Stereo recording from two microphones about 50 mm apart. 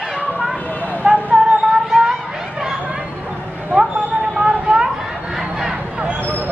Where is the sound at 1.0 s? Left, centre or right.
Right.